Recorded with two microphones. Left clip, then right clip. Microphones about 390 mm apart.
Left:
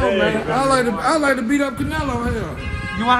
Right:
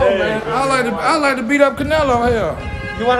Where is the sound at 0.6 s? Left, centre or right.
Centre.